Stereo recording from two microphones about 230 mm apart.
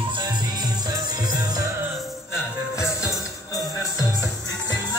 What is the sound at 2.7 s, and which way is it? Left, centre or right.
Music, centre.